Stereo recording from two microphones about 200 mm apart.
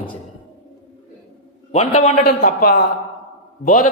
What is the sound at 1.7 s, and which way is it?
Speech, 30° left (ahead or behind).